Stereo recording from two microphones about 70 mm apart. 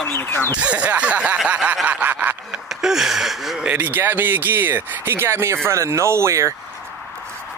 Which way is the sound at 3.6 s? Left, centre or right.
Right.